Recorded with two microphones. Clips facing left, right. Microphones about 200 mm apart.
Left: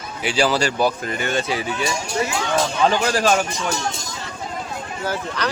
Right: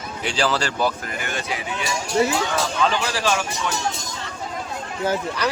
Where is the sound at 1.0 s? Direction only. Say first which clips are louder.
Left 6 dB; 25° left (ahead or behind).